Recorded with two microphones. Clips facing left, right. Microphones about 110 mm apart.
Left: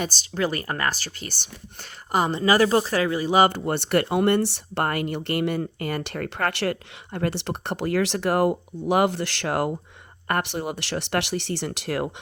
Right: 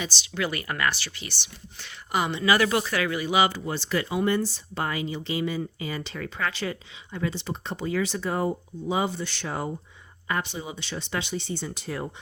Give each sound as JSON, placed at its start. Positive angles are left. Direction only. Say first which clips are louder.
{"t": 0.0, "sound": "speech", "louder": "left 4 dB", "side_deg": 45}
{"t": 3.3, "sound": "speech", "louder": "left 5 dB", "side_deg": 50}
{"t": 6.3, "sound": "speech", "louder": "left 5 dB", "side_deg": 70}
{"t": 10.2, "sound": "speech", "louder": "left 5 dB", "side_deg": 65}